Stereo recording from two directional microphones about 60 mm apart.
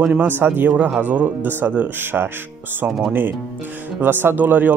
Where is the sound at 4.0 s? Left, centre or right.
Right.